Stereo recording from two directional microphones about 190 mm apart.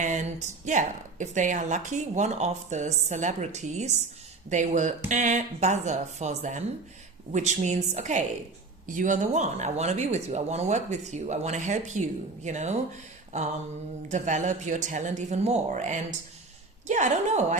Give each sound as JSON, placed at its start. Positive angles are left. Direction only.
{"t": 0.0, "sound": "speech", "side_deg": -40}
{"t": 14.1, "sound": "speech", "side_deg": -40}